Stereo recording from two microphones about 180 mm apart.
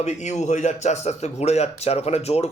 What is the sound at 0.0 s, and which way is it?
Speech, 40° left (ahead or behind).